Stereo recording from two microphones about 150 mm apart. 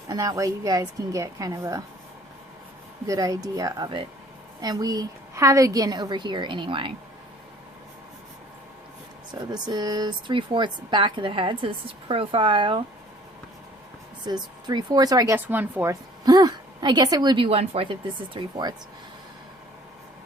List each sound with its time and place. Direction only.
0.1 s a woman's voice: 25° right (ahead or behind)
3.1 s a woman's voice: 25° right (ahead or behind)
9.3 s speech: 30° right (ahead or behind)
14.3 s a woman's voice: 30° right (ahead or behind)
15.4 s speech: 15° right (ahead or behind)
16.2 s a woman's voice: 25° right (ahead or behind)
18.3 s a woman's voice: 30° right (ahead or behind)